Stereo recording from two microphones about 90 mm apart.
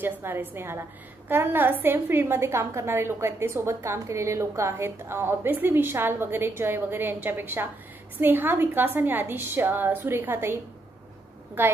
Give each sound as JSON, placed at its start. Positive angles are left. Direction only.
{"t": 0.0, "sound": "a woman's voice", "side_deg": -25}